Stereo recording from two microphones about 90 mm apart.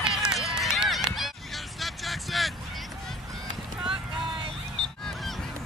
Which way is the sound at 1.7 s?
Centre (ahead or behind).